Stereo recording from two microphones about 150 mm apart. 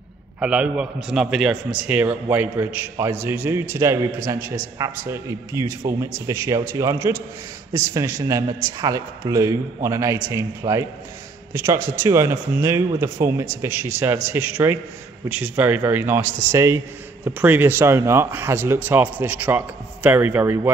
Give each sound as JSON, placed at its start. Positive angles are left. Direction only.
{"t": 0.4, "sound": "a man's voice", "side_deg": -5}